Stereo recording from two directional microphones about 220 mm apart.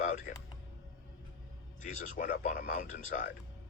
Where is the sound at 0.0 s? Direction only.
35° left (ahead or behind).